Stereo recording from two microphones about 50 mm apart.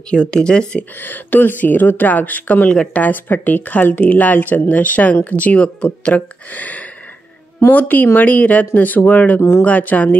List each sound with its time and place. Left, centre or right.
0.1 s speech: centre
1.0 s speech: left
2.7 s speech: centre
3.0 s speech: left
9.4 s speech: left
9.7 s speech: left